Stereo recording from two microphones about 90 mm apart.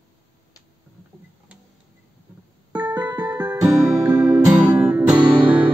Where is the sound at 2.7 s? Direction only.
50° right (ahead or behind).